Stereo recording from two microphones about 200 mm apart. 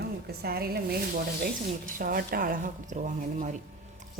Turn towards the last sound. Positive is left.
turn(degrees=-40)  # may be behind; listen again after turning